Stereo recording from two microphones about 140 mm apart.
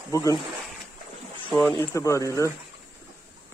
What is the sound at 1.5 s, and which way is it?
Speech, 10° left (ahead or behind).